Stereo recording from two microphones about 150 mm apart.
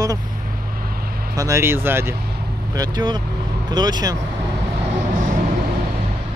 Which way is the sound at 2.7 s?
25° right (ahead or behind).